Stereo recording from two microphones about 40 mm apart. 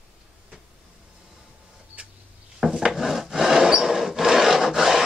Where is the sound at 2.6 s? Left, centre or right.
Centre.